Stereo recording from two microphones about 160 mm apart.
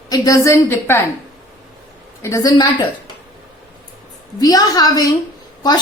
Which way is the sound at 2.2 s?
20° left (ahead or behind).